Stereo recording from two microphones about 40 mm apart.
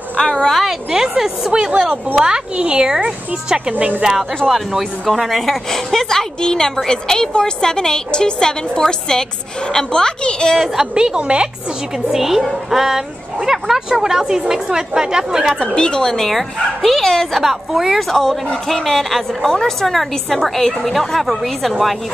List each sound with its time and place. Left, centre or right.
0.2 s a woman's voice: left
0.7 s a woman's voice: centre
2.1 s a woman's voice: right
4.5 s a woman's voice: centre
11.0 s speech: right
12.1 s a woman's voice: centre
15.6 s a woman's voice: left
16.3 s a woman's voice: centre